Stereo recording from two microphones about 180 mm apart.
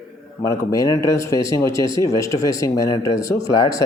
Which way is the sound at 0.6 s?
20° left (ahead or behind).